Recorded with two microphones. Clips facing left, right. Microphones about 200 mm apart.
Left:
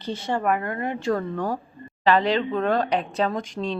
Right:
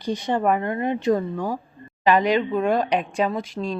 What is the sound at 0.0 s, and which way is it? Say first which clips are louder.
Speech: right 3 dB; 15° right (ahead or behind).